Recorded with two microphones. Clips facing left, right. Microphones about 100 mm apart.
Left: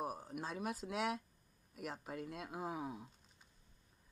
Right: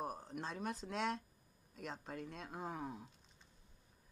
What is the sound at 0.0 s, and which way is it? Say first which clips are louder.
Speech: left 1 dB; 5° left (ahead or behind).